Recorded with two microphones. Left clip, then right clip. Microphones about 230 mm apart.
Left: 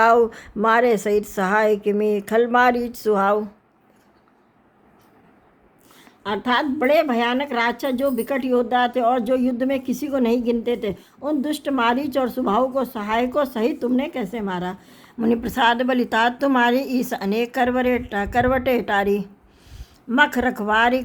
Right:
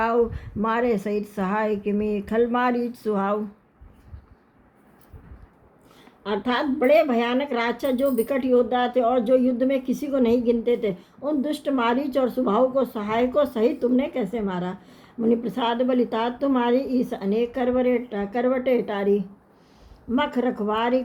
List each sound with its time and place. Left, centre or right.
0.0 s a woman's voice: left
6.2 s speech: left